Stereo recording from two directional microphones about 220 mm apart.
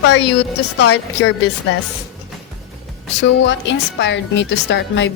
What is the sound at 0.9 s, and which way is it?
Speech, 50° left (ahead or behind).